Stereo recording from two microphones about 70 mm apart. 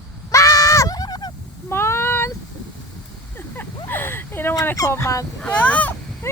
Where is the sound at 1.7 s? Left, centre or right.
Left.